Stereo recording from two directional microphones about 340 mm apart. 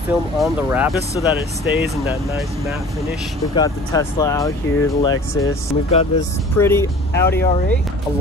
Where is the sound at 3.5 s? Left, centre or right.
Centre.